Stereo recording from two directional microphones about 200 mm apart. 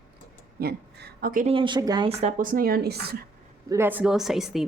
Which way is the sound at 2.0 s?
40° right (ahead or behind).